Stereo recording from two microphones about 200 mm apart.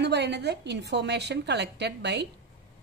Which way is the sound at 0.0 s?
60° right (ahead or behind).